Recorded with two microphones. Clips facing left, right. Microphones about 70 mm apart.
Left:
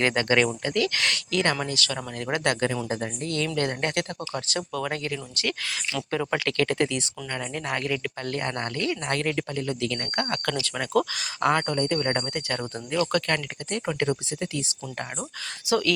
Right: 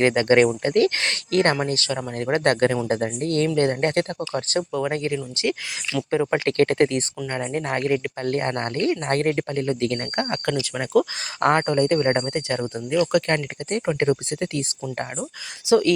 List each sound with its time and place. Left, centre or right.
0.3 s speech: right
1.3 s speech: right
3.5 s speech: right
4.7 s speech: right
10.2 s speech: right
11.3 s speech: right
12.5 s speech: centre
13.2 s speech: right
14.4 s speech: right
15.6 s speech: right